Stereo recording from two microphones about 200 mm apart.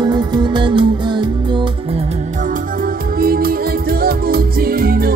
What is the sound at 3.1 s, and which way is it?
Music, 45° right (ahead or behind).